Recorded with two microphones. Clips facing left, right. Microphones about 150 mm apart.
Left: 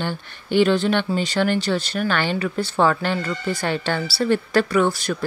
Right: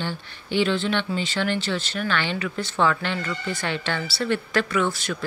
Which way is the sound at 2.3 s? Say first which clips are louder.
Left 5 dB; 35° left (ahead or behind).